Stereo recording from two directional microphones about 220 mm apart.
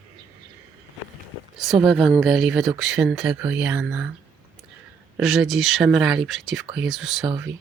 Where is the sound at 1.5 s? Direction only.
Centre (ahead or behind).